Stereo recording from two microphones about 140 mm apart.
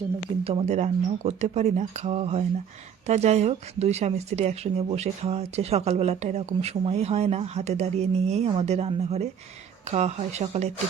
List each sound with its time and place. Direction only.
0.4 s speech: 50° right (ahead or behind)